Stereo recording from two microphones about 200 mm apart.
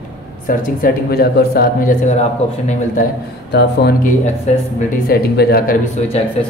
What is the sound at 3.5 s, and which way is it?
Speech, 55° left (ahead or behind).